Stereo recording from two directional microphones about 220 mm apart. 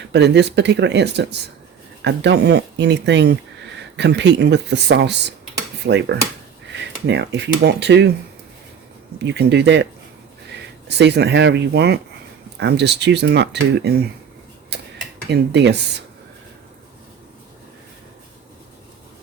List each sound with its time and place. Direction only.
0.1 s speech: 50° right (ahead or behind)
9.1 s speech: 50° right (ahead or behind)
10.8 s speech: 50° right (ahead or behind)
15.3 s speech: 50° right (ahead or behind)